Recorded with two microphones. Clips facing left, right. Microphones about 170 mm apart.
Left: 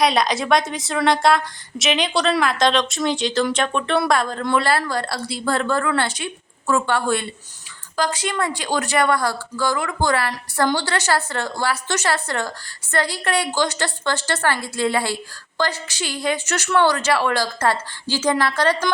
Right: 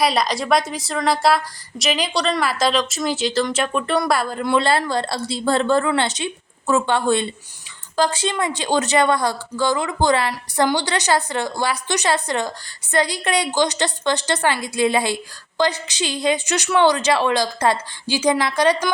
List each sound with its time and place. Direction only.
0.0 s speech: centre (ahead or behind)
4.5 s a woman's voice: 20° right (ahead or behind)